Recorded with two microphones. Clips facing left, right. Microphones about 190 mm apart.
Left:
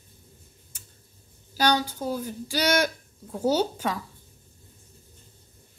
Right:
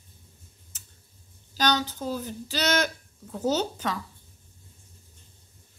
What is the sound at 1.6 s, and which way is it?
Speech, 10° left (ahead or behind).